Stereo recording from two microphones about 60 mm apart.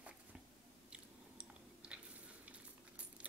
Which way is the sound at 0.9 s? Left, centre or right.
Centre.